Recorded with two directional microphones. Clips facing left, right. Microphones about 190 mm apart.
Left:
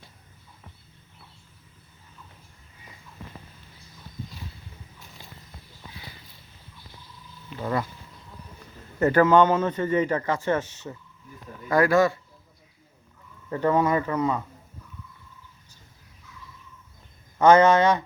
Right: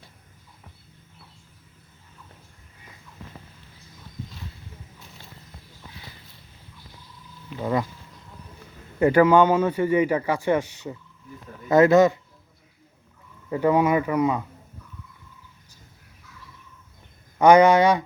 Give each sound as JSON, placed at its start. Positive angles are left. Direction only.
{"t": 7.6, "sound": "speech", "side_deg": -15}
{"t": 9.0, "sound": "speech", "side_deg": -10}
{"t": 13.5, "sound": "speech", "side_deg": -10}
{"t": 17.3, "sound": "speech", "side_deg": -15}